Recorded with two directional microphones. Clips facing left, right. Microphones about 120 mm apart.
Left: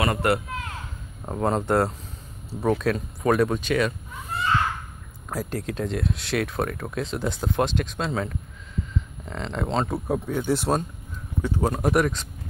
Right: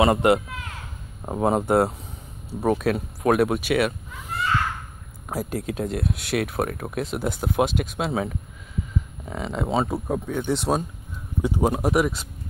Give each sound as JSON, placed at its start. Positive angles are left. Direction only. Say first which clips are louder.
{"t": 0.0, "sound": "a man's voice", "louder": "right 5 dB", "side_deg": -20}
{"t": 5.3, "sound": "speech", "louder": "right 2 dB", "side_deg": -10}
{"t": 11.4, "sound": "speech", "louder": "right 3 dB", "side_deg": -15}
{"t": 11.8, "sound": "speech", "louder": "even", "side_deg": -5}